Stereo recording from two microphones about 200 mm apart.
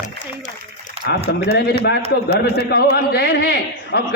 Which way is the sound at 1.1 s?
55° left (ahead or behind).